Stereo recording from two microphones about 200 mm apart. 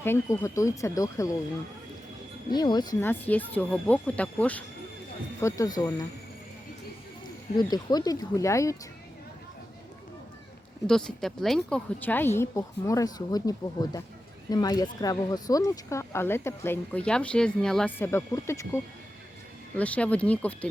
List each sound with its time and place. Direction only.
0.0 s speech: 15° left (ahead or behind)
2.5 s speech: 20° left (ahead or behind)
7.5 s speech: 20° left (ahead or behind)
10.8 s speech: 5° left (ahead or behind)